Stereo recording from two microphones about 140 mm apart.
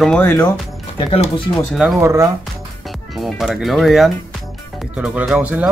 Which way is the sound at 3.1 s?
Centre (ahead or behind).